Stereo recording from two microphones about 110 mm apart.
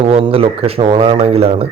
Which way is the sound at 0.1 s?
60° right (ahead or behind).